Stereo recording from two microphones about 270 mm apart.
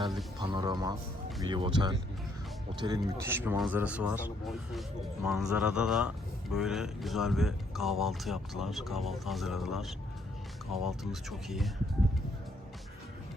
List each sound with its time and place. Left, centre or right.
0.3 s a man's voice: centre